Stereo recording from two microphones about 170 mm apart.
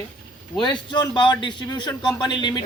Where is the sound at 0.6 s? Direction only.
25° left (ahead or behind).